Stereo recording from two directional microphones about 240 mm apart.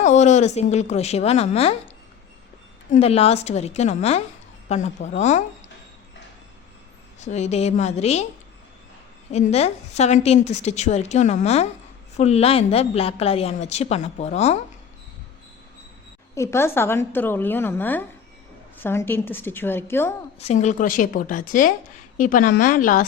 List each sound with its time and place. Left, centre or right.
0.0 s a woman's voice: left
2.9 s a woman's voice: left
7.2 s a woman's voice: left
9.3 s a woman's voice: left
16.3 s a woman's voice: centre
20.4 s a woman's voice: left